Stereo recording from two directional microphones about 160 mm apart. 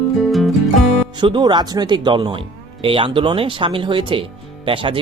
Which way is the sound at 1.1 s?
30° right (ahead or behind).